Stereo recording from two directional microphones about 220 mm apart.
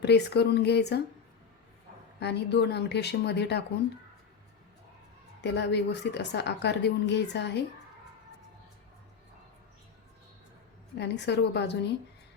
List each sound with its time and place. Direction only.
0.0 s a woman's voice: 50° left (ahead or behind)
2.1 s a woman's voice: 50° left (ahead or behind)
5.4 s a woman's voice: 50° left (ahead or behind)
10.9 s a woman's voice: 50° left (ahead or behind)